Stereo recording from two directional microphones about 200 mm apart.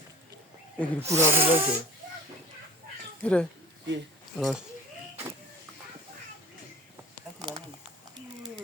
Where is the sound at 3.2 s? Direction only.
5° left (ahead or behind).